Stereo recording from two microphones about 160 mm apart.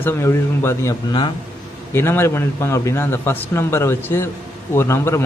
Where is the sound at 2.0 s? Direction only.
15° left (ahead or behind).